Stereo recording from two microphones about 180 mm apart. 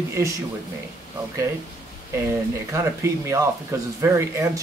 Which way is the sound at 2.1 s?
15° right (ahead or behind).